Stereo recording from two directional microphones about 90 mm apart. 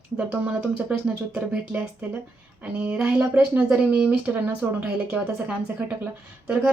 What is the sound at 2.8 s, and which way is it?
Speech, 20° right (ahead or behind).